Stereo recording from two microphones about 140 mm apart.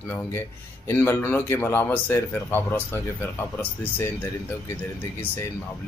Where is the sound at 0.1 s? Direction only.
15° left (ahead or behind).